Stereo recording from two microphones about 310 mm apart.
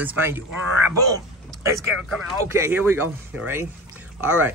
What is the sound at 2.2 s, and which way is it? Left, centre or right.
Speech, centre.